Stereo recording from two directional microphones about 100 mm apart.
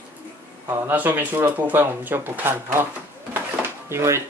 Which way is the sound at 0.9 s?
20° right (ahead or behind).